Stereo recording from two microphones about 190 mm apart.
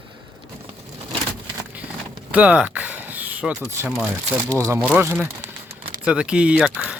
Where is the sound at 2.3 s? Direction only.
5° right (ahead or behind).